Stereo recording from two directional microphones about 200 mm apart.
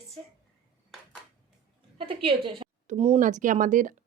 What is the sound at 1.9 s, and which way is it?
A woman's voice, 25° right (ahead or behind).